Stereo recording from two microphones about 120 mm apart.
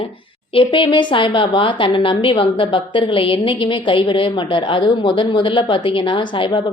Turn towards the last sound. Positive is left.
turn(degrees=45)  # may be behind; listen again after turning